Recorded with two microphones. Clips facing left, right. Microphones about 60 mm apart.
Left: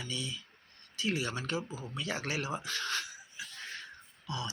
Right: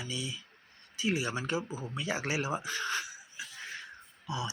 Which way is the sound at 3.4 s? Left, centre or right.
Centre.